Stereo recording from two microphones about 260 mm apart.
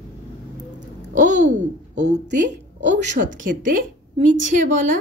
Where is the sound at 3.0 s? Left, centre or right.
Right.